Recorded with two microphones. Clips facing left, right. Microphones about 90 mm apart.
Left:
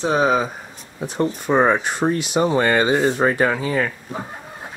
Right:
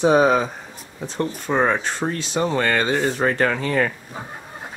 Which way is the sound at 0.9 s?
15° left (ahead or behind).